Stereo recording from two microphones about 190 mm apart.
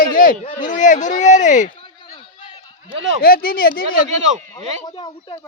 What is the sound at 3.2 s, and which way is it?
Speech, 50° left (ahead or behind).